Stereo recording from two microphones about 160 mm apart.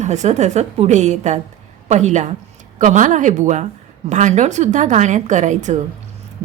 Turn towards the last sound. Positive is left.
turn(degrees=-50)  # may be behind; listen again after turning